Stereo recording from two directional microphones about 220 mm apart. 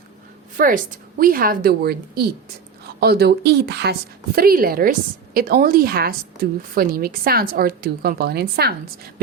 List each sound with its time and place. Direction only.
0.5 s a woman's voice: 40° right (ahead or behind)